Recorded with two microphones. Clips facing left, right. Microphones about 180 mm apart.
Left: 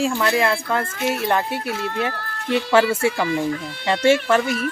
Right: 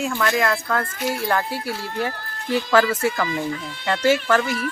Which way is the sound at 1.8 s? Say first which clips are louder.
Left 2 dB; 65° left (ahead or behind).